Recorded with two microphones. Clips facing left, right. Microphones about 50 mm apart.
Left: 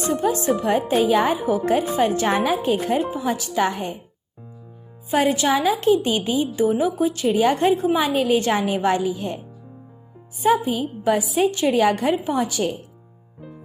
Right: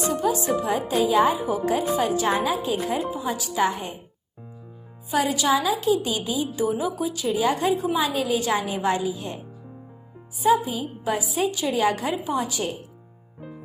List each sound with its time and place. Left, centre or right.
0.2 s a woman's voice: left
1.1 s a woman's voice: left
5.1 s a woman's voice: left
10.4 s a woman's voice: left
11.4 s a woman's voice: left